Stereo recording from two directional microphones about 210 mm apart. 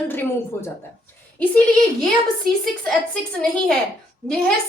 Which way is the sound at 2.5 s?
45° right (ahead or behind).